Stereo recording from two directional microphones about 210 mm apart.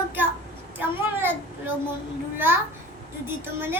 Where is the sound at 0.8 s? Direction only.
10° right (ahead or behind).